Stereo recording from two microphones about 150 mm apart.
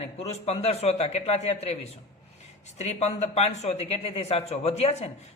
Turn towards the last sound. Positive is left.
turn(degrees=45)  # may be behind; listen again after turning